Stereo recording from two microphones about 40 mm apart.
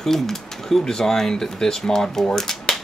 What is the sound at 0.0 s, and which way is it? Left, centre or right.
Speech, centre.